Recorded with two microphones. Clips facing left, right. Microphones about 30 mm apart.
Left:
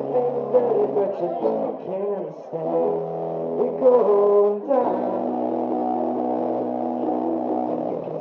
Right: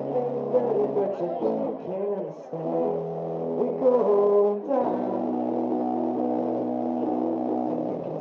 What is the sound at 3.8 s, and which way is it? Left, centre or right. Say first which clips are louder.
Music: left 4 dB; centre.